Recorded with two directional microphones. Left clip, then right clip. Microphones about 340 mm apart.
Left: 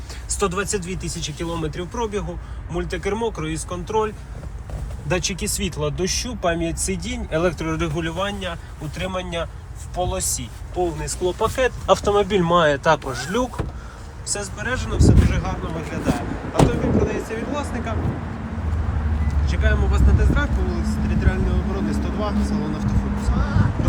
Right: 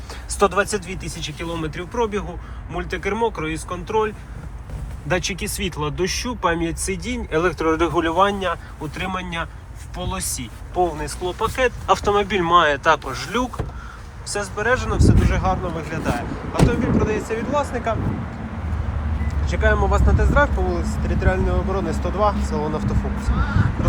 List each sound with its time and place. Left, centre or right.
0.3 s speech: centre
19.5 s speech: centre
22.4 s speech: centre